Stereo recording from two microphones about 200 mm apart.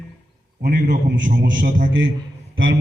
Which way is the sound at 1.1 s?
60° right (ahead or behind).